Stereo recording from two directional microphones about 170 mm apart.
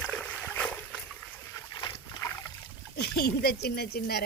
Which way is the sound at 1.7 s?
25° left (ahead or behind).